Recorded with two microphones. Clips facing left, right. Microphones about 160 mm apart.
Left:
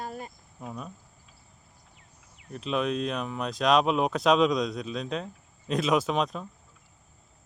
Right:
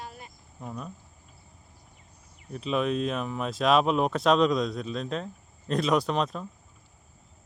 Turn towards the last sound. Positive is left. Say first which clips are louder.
# even
turn(degrees=0)  # may be behind; listen again after turning